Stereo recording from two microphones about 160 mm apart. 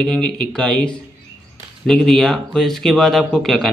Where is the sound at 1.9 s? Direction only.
Centre (ahead or behind).